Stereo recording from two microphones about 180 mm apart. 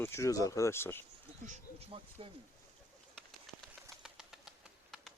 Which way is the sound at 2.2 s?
30° right (ahead or behind).